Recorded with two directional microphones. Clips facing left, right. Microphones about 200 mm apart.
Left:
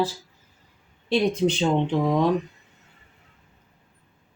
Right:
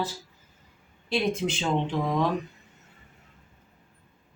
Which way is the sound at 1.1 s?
35° left (ahead or behind).